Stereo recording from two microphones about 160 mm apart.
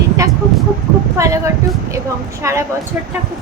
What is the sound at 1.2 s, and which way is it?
A woman's voice, 20° right (ahead or behind).